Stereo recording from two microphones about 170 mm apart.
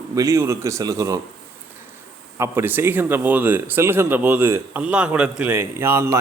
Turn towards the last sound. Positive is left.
turn(degrees=-15)  # may be behind; listen again after turning